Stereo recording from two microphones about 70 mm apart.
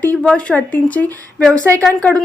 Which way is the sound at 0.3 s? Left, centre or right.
Centre.